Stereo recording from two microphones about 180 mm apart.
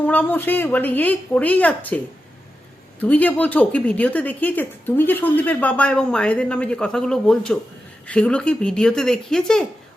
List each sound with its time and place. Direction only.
0.1 s speech: 10° left (ahead or behind)
3.0 s speech: 10° left (ahead or behind)